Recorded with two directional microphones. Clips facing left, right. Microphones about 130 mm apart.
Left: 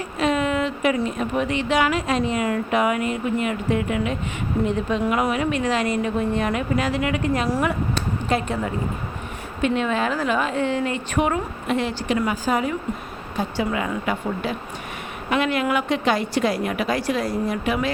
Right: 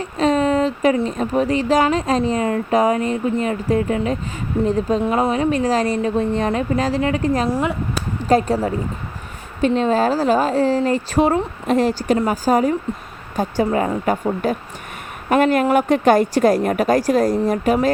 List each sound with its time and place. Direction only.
0.2 s speech: 35° right (ahead or behind)
7.5 s speech: 20° right (ahead or behind)
8.2 s a woman's voice: 35° right (ahead or behind)